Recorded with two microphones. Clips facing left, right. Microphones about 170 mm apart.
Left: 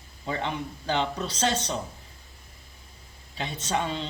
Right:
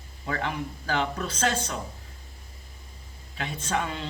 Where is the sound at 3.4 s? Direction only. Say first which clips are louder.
Left 1 dB; 30° left (ahead or behind).